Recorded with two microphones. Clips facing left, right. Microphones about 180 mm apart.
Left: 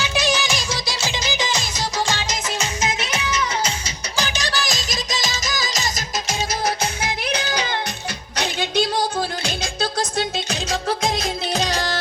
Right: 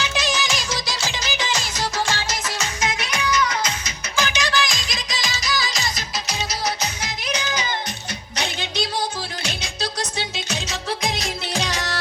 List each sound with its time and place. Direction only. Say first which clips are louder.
0.2 s music of bollywood: left 5 dB; 15° left (ahead or behind); by 5.8 s 45° left (ahead or behind)
7.0 s music: left 3 dB; 55° left (ahead or behind)
11.5 s music: left 3 dB; 35° left (ahead or behind)